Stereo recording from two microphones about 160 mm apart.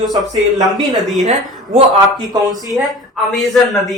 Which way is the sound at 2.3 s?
25° right (ahead or behind).